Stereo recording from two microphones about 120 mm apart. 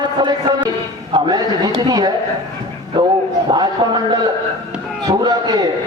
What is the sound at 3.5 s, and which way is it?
A man's voice, 40° right (ahead or behind).